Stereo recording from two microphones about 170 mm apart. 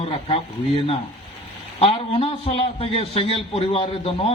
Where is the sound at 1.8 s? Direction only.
35° left (ahead or behind).